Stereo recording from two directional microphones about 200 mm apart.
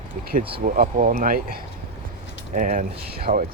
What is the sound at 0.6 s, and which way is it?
Speech, 40° right (ahead or behind).